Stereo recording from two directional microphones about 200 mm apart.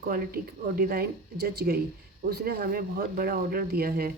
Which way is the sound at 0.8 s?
50° right (ahead or behind).